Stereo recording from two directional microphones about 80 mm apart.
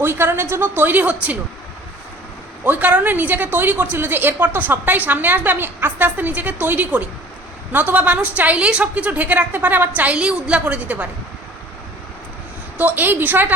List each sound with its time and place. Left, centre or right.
0.0 s a woman's voice: right
2.6 s a woman's voice: centre
12.7 s a woman's voice: right